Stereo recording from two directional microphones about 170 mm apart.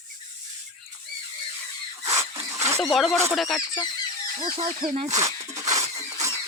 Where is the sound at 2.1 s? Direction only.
15° right (ahead or behind).